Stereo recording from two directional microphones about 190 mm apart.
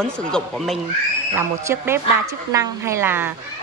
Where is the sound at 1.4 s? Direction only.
10° right (ahead or behind).